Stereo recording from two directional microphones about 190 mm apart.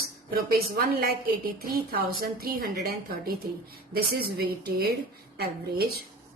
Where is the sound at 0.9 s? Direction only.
50° right (ahead or behind).